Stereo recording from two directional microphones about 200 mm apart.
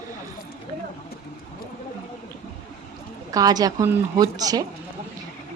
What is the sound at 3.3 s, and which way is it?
Speech, 20° right (ahead or behind).